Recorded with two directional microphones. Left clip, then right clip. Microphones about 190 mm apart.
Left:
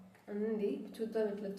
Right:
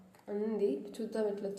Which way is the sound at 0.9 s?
25° right (ahead or behind).